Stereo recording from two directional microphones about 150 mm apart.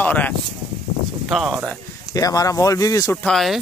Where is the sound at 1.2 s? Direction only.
Centre (ahead or behind).